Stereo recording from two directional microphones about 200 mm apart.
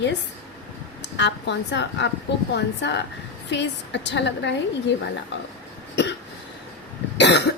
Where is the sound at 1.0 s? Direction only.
60° left (ahead or behind).